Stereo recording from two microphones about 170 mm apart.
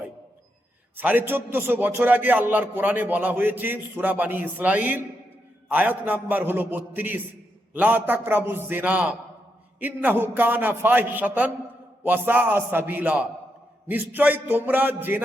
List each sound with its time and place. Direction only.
0.9 s a man's voice: 10° right (ahead or behind)